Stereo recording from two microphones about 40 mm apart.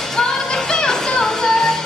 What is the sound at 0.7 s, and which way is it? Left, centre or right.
Music, centre.